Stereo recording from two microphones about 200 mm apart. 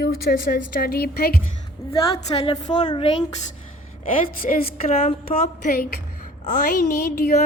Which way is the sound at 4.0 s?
40° left (ahead or behind).